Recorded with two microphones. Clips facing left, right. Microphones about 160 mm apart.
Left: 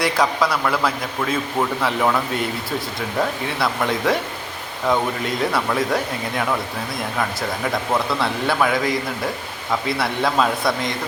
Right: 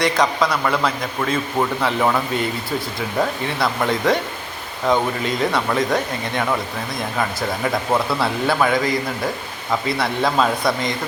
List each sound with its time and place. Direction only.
0.0 s a man's voice: 5° left (ahead or behind)